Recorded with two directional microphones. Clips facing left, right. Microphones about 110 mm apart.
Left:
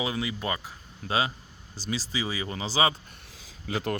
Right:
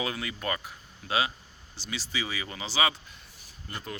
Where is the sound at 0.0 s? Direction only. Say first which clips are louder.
Left 3 dB; 20° left (ahead or behind).